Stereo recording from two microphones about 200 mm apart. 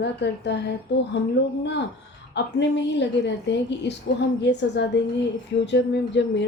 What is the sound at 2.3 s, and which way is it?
A woman's voice, 60° left (ahead or behind).